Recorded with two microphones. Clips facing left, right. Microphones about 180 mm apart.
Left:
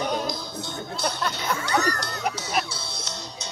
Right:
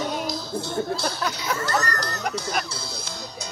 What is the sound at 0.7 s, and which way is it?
Music, 5° right (ahead or behind).